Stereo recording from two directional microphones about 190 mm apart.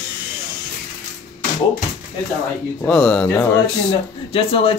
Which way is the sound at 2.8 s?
5° left (ahead or behind).